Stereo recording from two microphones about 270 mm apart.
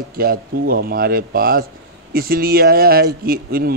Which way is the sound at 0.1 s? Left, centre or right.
Right.